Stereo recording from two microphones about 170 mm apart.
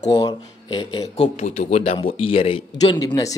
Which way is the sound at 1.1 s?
40° left (ahead or behind).